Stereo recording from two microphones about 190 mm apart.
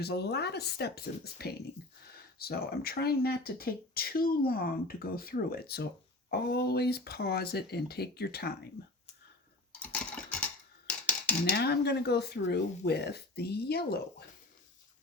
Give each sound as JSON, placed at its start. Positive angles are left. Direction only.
{"t": 0.0, "sound": "speech", "side_deg": 60}
{"t": 9.8, "sound": "typing", "side_deg": 5}
{"t": 11.5, "sound": "speech", "side_deg": 60}